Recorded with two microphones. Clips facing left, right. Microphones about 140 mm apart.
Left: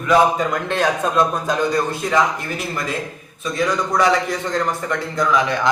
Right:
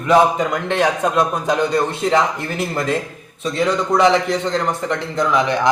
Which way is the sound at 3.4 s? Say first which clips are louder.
Right 2 dB; 25° right (ahead or behind).